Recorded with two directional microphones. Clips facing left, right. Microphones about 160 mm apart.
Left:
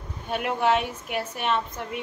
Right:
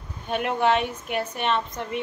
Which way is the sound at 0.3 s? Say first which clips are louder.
Right 1 dB; 5° left (ahead or behind).